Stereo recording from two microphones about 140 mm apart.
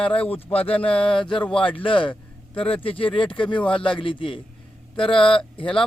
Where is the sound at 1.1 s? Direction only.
40° left (ahead or behind).